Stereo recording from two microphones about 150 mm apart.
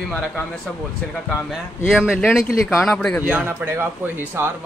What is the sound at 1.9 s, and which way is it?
Speech, centre (ahead or behind).